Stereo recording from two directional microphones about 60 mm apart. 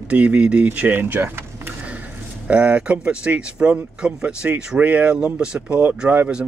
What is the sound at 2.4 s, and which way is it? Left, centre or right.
Speech, right.